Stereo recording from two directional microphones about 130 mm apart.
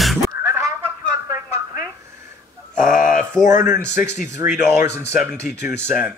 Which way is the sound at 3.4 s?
80° left.